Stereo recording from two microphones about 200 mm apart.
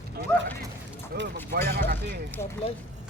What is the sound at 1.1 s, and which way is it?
Boat, 50° right (ahead or behind).